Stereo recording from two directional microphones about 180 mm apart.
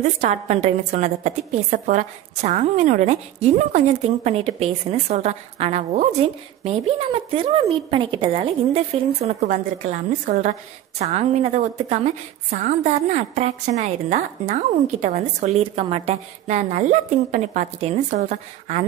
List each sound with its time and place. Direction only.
0.0 s a woman's voice: 40° right (ahead or behind)